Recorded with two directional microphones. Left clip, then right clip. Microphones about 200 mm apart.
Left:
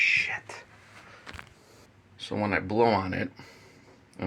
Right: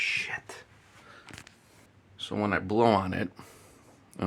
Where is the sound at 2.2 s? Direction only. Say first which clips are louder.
Left 1 dB; 35° right (ahead or behind).